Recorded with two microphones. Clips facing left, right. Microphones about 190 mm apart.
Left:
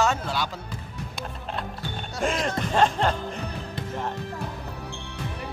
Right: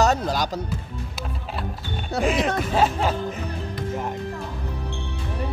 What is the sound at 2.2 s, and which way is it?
Speech, 5° right (ahead or behind).